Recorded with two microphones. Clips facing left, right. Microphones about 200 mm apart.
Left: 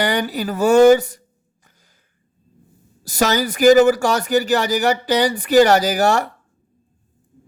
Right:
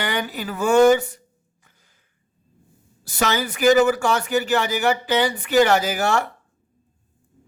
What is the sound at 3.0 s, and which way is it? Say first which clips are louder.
Speech: left 4 dB; 40° left (ahead or behind).